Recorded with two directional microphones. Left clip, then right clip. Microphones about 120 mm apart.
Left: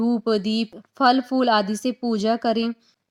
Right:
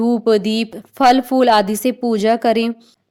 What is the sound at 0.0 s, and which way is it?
Speech, 40° right (ahead or behind).